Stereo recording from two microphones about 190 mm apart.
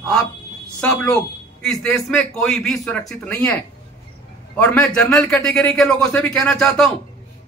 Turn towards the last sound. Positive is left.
turn(degrees=5)  # may be behind; listen again after turning